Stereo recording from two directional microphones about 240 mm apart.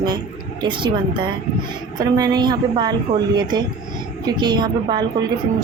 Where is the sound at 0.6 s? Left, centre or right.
Centre.